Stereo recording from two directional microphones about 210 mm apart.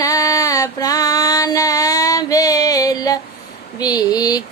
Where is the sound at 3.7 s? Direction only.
20° left (ahead or behind).